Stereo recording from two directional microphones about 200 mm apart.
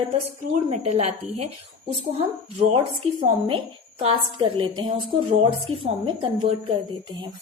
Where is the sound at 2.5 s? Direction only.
30° right (ahead or behind).